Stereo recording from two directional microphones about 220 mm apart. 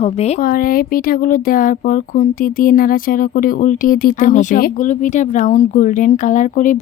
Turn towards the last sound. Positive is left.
turn(degrees=35)  # may be behind; listen again after turning